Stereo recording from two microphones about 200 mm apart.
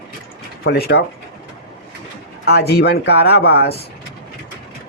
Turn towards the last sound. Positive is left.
turn(degrees=55)  # may be behind; listen again after turning